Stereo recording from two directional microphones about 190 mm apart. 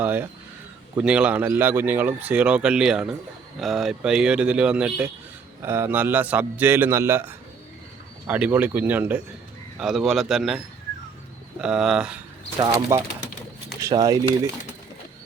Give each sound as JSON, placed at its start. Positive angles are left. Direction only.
{"t": 0.0, "sound": "speech", "side_deg": -10}
{"t": 11.6, "sound": "speech", "side_deg": -5}